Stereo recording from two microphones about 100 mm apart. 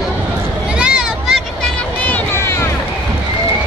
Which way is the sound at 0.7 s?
10° right (ahead or behind).